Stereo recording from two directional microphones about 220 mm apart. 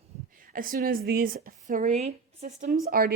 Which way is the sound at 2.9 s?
45° right (ahead or behind).